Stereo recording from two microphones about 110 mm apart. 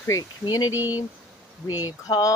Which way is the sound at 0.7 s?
15° right (ahead or behind).